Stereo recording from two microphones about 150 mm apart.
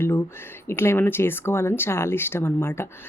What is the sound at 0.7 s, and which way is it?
Speech, 15° left (ahead or behind).